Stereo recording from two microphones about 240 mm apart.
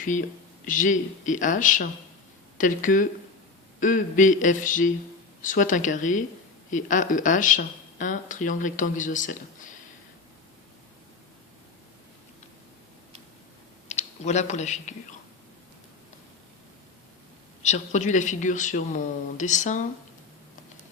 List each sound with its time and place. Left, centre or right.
0.0 s speech: left
13.8 s speech: left
17.6 s speech: left